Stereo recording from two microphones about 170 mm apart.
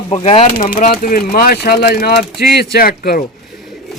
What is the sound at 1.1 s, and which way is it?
Speech, 60° left (ahead or behind).